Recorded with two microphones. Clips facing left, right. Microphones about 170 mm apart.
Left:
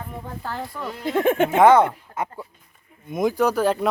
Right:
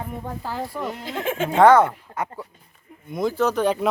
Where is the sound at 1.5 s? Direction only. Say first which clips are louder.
Right 2 dB; 15° left (ahead or behind).